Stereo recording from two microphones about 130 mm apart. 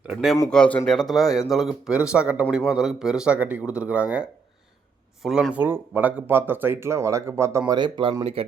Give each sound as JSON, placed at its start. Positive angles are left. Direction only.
{"t": 0.1, "sound": "speech", "side_deg": -5}
{"t": 0.5, "sound": "speech", "side_deg": 10}
{"t": 7.7, "sound": "speech", "side_deg": -35}